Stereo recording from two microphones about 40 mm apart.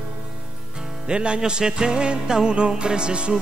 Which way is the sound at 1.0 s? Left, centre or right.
Right.